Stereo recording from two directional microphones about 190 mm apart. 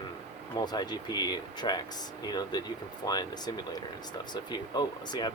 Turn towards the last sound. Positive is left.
turn(degrees=25)  # may be behind; listen again after turning